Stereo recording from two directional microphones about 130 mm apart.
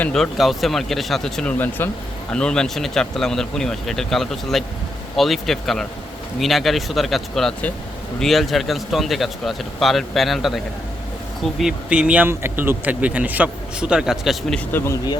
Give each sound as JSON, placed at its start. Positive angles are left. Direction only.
{"t": 0.0, "sound": "speech", "side_deg": 5}
{"t": 11.6, "sound": "speech", "side_deg": -10}
{"t": 14.7, "sound": "speech", "side_deg": 15}